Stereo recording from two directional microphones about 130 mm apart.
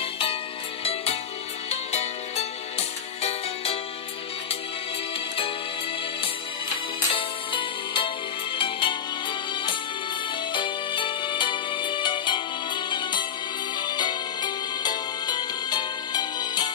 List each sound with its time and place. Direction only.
0.0 s music: 45° left (ahead or behind)
1.7 s music: 55° left (ahead or behind)
7.2 s music: 40° left (ahead or behind)
10.5 s music: 40° left (ahead or behind)